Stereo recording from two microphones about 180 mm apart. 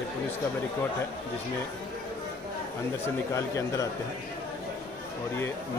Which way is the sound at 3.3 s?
15° left (ahead or behind).